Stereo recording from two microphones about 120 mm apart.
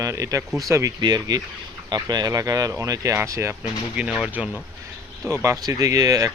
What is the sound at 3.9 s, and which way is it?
Speech, 10° right (ahead or behind).